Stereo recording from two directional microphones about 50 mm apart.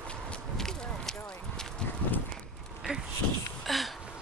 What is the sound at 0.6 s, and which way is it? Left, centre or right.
Walk, centre.